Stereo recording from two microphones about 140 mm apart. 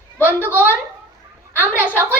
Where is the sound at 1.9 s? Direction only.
10° right (ahead or behind).